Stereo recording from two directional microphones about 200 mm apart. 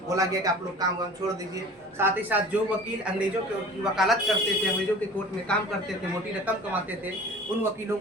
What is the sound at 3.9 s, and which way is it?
Speech, centre (ahead or behind).